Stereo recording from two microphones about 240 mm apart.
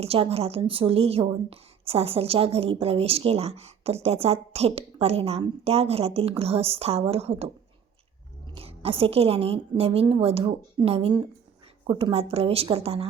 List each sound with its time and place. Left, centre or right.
0.0 s a woman's voice: right